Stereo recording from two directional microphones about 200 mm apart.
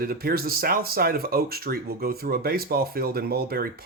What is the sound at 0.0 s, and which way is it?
Speech, 50° right (ahead or behind).